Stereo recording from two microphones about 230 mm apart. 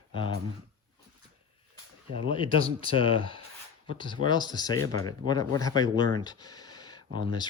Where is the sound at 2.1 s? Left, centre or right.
Left.